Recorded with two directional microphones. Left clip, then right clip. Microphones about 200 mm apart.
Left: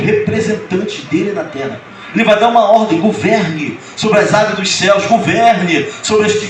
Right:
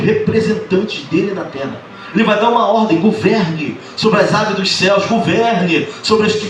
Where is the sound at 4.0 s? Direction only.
25° left (ahead or behind).